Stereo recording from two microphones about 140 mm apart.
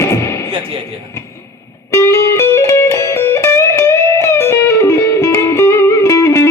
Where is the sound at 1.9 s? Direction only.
20° left (ahead or behind).